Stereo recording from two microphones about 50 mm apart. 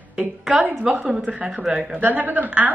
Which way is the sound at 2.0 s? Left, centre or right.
Right.